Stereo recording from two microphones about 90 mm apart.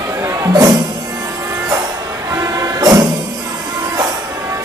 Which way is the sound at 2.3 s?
35° right (ahead or behind).